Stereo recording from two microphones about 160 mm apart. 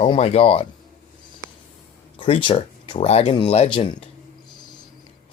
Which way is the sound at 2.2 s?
30° left (ahead or behind).